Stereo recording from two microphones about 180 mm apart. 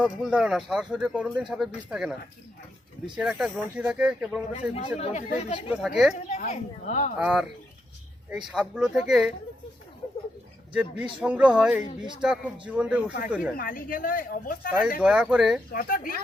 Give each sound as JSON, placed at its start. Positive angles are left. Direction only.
{"t": 0.0, "sound": "speech", "side_deg": -5}
{"t": 3.2, "sound": "speech", "side_deg": -5}
{"t": 4.7, "sound": "speech", "side_deg": 35}
{"t": 5.6, "sound": "speech", "side_deg": -5}
{"t": 6.1, "sound": "a woman's voice", "side_deg": 40}
{"t": 7.2, "sound": "speech", "side_deg": -5}
{"t": 8.4, "sound": "speech", "side_deg": -5}
{"t": 10.7, "sound": "speech", "side_deg": -10}
{"t": 13.6, "sound": "a woman's voice", "side_deg": 50}
{"t": 14.9, "sound": "speech", "side_deg": -5}
{"t": 15.7, "sound": "a woman's voice", "side_deg": 50}